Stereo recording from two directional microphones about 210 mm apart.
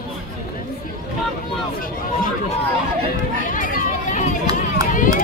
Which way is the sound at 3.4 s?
40° left (ahead or behind).